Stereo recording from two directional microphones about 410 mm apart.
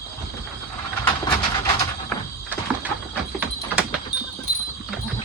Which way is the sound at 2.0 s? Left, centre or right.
Centre.